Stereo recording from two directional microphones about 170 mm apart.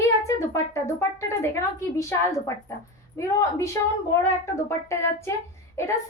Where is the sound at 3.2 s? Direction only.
20° left (ahead or behind).